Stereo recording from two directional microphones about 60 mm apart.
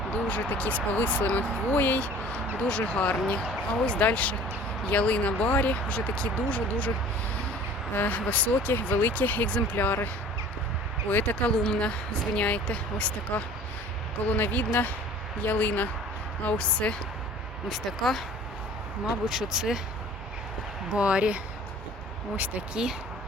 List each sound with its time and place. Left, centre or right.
0.3 s speech: left
2.6 s speech: centre
7.9 s speech: left
11.1 s speech: left
14.3 s speech: left
17.7 s speech: centre
19.0 s speech: centre
20.9 s speech: centre